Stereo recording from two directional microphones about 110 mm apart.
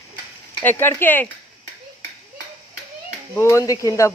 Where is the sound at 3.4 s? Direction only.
25° left (ahead or behind).